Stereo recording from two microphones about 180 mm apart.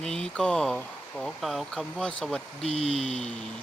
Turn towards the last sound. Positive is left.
turn(degrees=35)  # may be behind; listen again after turning